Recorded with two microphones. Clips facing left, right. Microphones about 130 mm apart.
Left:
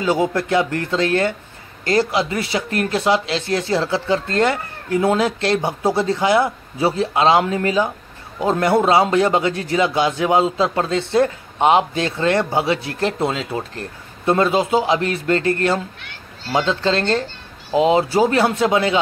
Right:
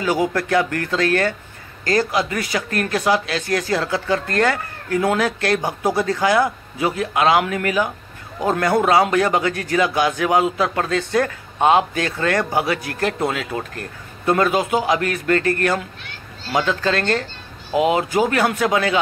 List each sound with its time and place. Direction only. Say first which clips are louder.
0.0 s speech: left 1 dB; 25° left (ahead or behind)